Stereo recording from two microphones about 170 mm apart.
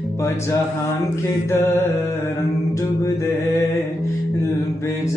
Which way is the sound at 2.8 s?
20° left (ahead or behind).